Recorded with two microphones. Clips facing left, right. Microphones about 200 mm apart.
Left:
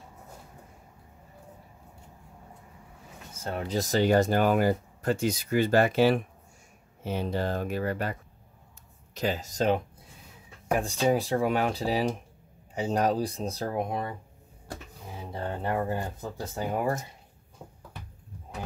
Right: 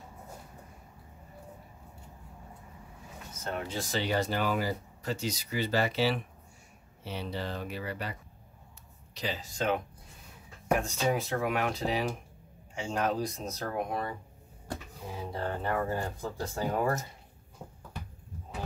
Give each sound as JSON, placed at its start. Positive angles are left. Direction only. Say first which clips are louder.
{"t": 3.4, "sound": "speech", "louder": "left 5 dB", "side_deg": 35}
{"t": 10.8, "sound": "speech", "louder": "left 5 dB", "side_deg": 35}
{"t": 15.3, "sound": "speech", "louder": "left 2 dB", "side_deg": 20}
{"t": 17.6, "sound": "a sound", "louder": "even", "side_deg": 10}